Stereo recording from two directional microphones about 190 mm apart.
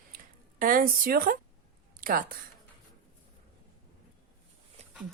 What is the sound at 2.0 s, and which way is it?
Speech, 45° right (ahead or behind).